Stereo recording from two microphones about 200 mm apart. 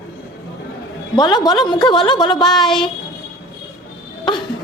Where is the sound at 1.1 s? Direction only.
20° left (ahead or behind).